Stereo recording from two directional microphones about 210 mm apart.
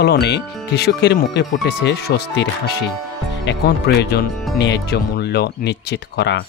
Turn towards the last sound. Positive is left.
turn(degrees=55)  # may be behind; listen again after turning